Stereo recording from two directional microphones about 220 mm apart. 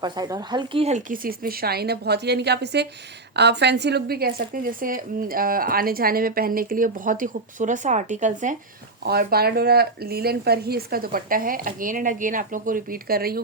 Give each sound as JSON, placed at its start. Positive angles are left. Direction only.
{"t": 0.0, "sound": "a woman's voice", "side_deg": -15}
{"t": 9.0, "sound": "speech", "side_deg": -45}